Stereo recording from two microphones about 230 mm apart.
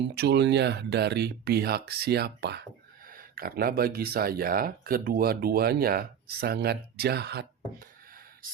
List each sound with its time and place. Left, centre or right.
0.1 s speech: right